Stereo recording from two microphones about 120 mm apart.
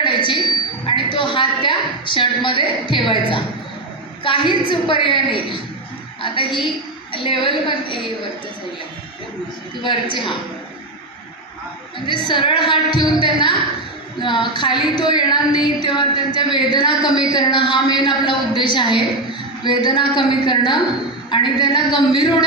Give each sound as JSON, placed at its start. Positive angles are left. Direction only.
{"t": 0.0, "sound": "a sound", "side_deg": 40}
{"t": 4.2, "sound": "speech", "side_deg": 45}
{"t": 9.8, "sound": "speech", "side_deg": 40}
{"t": 12.0, "sound": "a woman's voice", "side_deg": 40}